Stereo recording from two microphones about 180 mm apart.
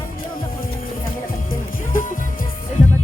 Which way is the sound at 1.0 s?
50° left (ahead or behind).